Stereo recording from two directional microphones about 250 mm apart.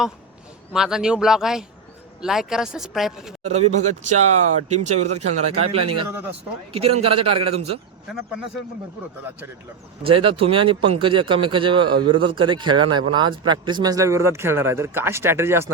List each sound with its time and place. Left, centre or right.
0.7 s speech: centre
3.4 s speech: right
10.0 s speech: right